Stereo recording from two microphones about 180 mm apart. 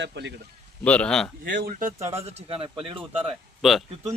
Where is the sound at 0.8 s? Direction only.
5° left (ahead or behind).